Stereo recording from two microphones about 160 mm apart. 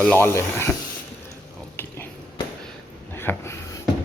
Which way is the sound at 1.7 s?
15° left (ahead or behind).